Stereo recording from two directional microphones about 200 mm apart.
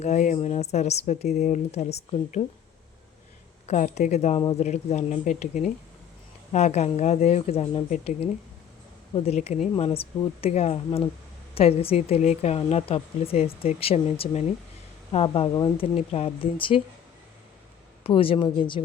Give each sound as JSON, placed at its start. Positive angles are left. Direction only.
{"t": 0.0, "sound": "speech", "side_deg": 35}
{"t": 3.7, "sound": "speech", "side_deg": 35}
{"t": 18.0, "sound": "speech", "side_deg": 25}